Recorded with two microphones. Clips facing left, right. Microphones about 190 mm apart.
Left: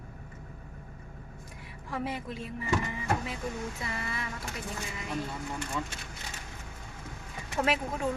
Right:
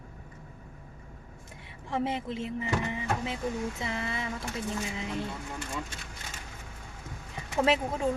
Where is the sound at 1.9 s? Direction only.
25° right (ahead or behind).